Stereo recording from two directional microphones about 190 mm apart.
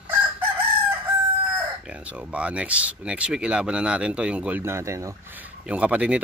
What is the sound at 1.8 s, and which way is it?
Speech, 5° right (ahead or behind).